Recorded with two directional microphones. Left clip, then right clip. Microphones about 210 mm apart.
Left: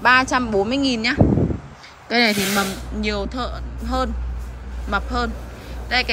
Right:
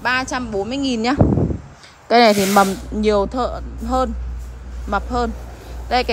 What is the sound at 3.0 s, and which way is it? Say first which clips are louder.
A woman's voice: right 8 dB; 25° right (ahead or behind).